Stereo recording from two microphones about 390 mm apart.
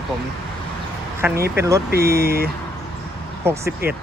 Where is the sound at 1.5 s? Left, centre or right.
Centre.